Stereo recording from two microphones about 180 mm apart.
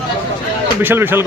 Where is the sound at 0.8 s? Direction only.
10° right (ahead or behind).